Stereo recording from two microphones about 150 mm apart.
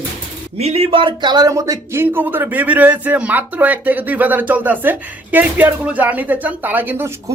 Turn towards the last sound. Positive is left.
turn(degrees=-15)  # may be behind; listen again after turning